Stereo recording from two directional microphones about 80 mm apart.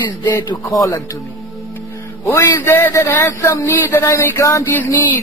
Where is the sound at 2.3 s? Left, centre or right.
Left.